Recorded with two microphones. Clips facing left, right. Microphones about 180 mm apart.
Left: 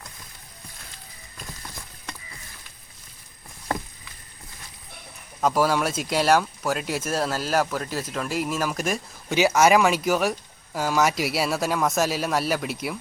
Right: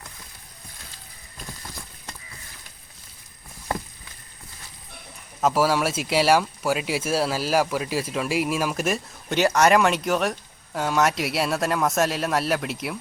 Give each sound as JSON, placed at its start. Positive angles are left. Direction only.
{"t": 5.4, "sound": "speech", "side_deg": -5}